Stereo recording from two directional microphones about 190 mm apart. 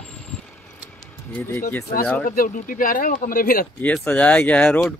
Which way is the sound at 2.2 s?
45° left (ahead or behind).